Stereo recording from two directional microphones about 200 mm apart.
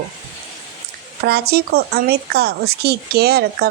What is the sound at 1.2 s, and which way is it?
Speech, 50° right (ahead or behind).